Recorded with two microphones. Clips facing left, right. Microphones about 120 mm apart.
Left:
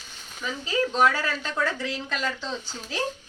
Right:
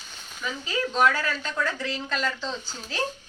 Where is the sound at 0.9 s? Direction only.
30° left (ahead or behind).